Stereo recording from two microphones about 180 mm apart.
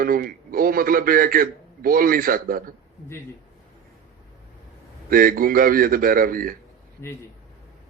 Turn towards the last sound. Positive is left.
turn(degrees=15)  # may be behind; listen again after turning